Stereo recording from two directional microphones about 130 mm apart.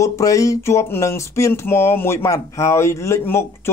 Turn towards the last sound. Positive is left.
turn(degrees=20)  # may be behind; listen again after turning